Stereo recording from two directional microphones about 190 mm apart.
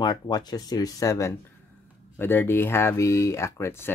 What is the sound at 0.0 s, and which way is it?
Speech, 20° left (ahead or behind).